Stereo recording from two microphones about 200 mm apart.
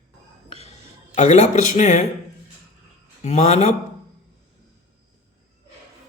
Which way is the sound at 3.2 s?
35° left (ahead or behind).